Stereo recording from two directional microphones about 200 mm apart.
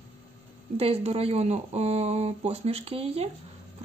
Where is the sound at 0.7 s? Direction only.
30° right (ahead or behind).